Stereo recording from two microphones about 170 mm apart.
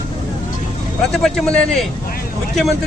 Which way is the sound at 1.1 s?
5° left (ahead or behind).